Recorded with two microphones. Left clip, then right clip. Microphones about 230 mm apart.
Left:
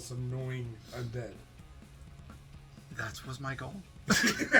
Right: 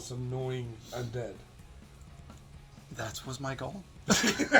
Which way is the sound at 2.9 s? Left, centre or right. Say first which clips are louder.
Right 1 dB; centre.